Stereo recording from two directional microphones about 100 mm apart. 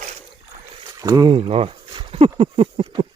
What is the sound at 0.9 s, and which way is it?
Speech, 35° right (ahead or behind).